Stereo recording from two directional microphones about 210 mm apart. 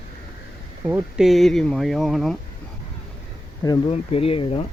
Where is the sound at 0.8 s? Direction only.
5° right (ahead or behind).